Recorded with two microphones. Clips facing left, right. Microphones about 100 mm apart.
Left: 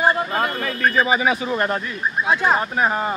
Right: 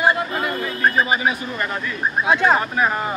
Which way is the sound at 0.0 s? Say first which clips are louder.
Left 1 dB; 35° left (ahead or behind).